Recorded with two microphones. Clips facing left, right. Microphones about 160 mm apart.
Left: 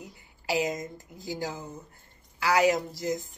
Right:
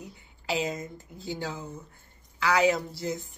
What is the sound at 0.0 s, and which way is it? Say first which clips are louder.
A woman's voice: even; 10° left (ahead or behind).